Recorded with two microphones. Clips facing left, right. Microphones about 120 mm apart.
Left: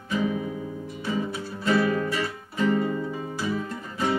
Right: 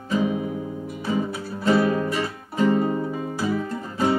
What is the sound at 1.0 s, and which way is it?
Music, 35° right (ahead or behind).